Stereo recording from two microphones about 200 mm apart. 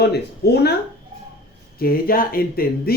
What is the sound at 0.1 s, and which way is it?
Speech, 55° left (ahead or behind).